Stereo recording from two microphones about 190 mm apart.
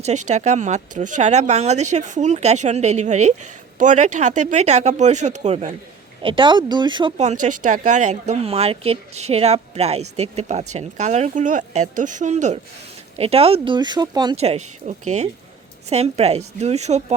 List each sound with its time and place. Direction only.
0.0 s speech: 40° right (ahead or behind)
6.2 s speech: 25° right (ahead or behind)
7.2 s speech: 40° right (ahead or behind); by 14.3 s 20° right (ahead or behind)
14.3 s speech: 35° right (ahead or behind)